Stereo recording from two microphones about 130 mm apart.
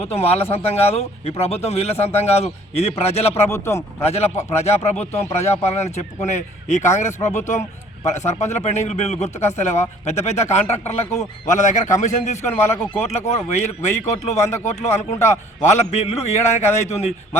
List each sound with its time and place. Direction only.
0.1 s speech: 50° left (ahead or behind)
3.3 s speech: 20° left (ahead or behind)
4.0 s speech: 55° left (ahead or behind)
11.4 s a man's voice: 70° left (ahead or behind)